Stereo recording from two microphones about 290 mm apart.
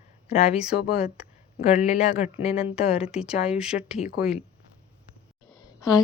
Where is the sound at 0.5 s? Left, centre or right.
Centre.